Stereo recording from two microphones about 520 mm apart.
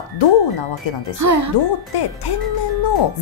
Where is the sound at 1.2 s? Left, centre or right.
Right.